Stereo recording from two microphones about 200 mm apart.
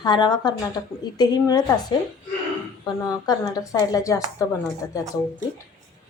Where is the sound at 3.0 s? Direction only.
20° left (ahead or behind).